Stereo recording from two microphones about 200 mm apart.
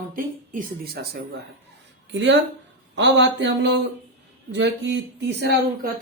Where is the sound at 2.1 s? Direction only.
60° right (ahead or behind).